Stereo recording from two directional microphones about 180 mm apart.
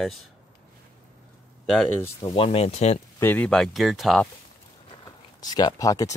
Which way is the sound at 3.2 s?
10° left (ahead or behind).